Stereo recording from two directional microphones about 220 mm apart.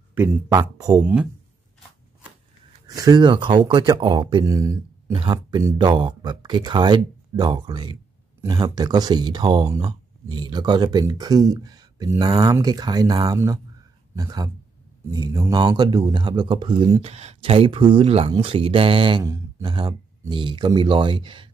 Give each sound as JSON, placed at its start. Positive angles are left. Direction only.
{"t": 0.1, "sound": "speech", "side_deg": -10}
{"t": 2.9, "sound": "speech", "side_deg": -15}